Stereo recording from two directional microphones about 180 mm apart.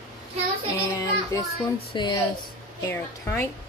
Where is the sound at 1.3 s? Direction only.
15° left (ahead or behind).